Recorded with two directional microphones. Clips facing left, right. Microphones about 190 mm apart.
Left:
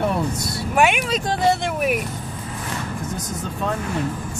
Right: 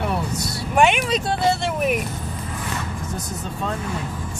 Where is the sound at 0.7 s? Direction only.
5° left (ahead or behind).